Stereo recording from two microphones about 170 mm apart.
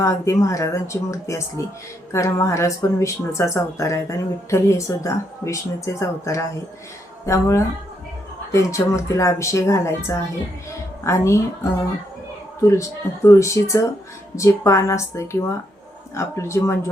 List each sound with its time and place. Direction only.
0.0 s a woman's voice: 20° left (ahead or behind)